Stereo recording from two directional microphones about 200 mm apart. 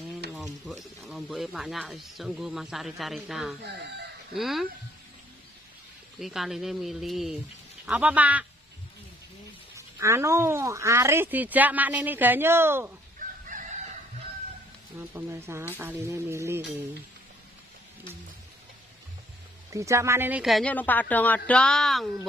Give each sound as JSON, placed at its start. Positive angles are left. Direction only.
{"t": 0.3, "sound": "a sound", "side_deg": 0}
{"t": 1.0, "sound": "speech", "side_deg": 0}
{"t": 3.6, "sound": "chicken", "side_deg": -60}
{"t": 4.4, "sound": "speech", "side_deg": 0}
{"t": 6.1, "sound": "speech", "side_deg": 0}
{"t": 9.8, "sound": "speech", "side_deg": -15}
{"t": 13.5, "sound": "chicken", "side_deg": -40}
{"t": 15.0, "sound": "speech", "side_deg": -15}
{"t": 19.7, "sound": "speech", "side_deg": -15}